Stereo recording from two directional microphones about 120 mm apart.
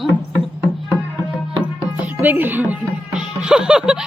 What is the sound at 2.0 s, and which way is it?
Music, 15° right (ahead or behind).